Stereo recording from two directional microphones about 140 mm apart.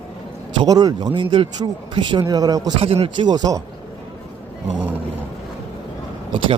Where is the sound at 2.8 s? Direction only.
40° right (ahead or behind).